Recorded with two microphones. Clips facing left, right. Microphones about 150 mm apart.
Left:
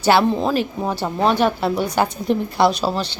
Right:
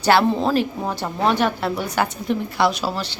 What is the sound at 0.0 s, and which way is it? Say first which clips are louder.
A woman's voice: left 1 dB; 10° left (ahead or behind).